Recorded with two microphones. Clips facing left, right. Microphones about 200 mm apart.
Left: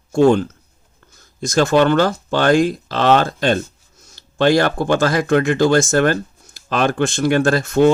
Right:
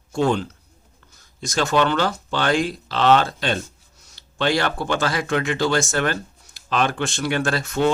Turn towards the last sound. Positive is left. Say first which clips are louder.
# left 7 dB
turn(degrees=45)  # may be behind; listen again after turning